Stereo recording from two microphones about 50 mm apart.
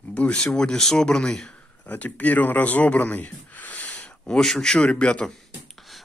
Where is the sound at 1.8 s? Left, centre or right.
Left.